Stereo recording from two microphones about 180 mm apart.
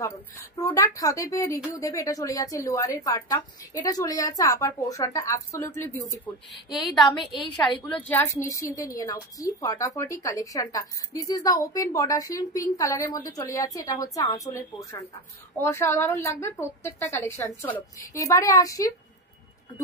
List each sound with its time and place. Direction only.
0.0 s a woman's voice: 20° left (ahead or behind)
6.7 s a woman's voice: centre (ahead or behind)
8.5 s a woman's voice: 15° left (ahead or behind)